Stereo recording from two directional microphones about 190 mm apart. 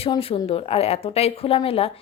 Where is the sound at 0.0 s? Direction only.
30° left (ahead or behind).